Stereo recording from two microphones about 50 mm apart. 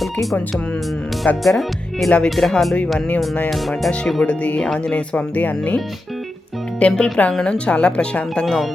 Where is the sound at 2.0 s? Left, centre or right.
Centre.